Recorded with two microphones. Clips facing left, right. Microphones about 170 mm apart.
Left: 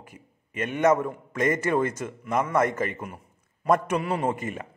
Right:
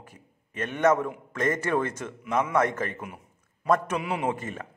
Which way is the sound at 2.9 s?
5° right (ahead or behind).